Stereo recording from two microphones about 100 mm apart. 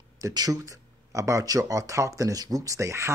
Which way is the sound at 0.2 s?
40° right (ahead or behind).